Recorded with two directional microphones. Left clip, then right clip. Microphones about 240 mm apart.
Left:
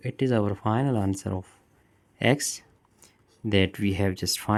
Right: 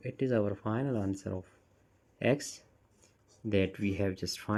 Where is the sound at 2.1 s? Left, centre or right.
Left.